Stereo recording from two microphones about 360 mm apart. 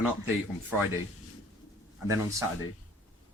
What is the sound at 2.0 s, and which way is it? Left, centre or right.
Speech, centre.